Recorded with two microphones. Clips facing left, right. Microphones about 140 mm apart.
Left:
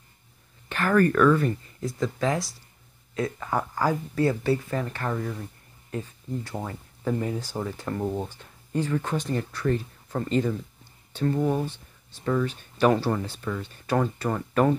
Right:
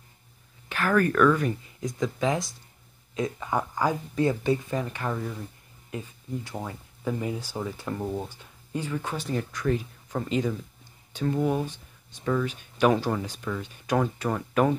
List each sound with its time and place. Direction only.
0.7 s speech: 10° right (ahead or behind)
8.0 s speech: 10° left (ahead or behind)
8.3 s speech: 10° right (ahead or behind)
12.2 s speech: 5° left (ahead or behind)
12.4 s speech: 10° right (ahead or behind)